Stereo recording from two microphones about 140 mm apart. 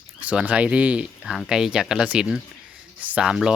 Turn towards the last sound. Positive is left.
turn(degrees=-5)  # may be behind; listen again after turning